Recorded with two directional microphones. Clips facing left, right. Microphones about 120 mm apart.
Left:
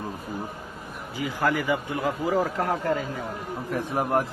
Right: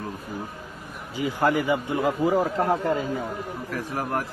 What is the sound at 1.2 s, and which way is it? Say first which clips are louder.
A man's voice: right 3 dB; 20° right (ahead or behind).